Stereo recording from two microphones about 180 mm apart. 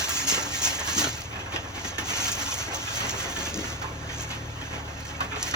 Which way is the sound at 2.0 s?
20° right (ahead or behind).